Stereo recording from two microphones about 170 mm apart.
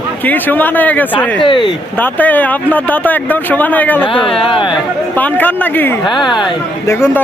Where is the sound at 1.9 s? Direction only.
10° left (ahead or behind).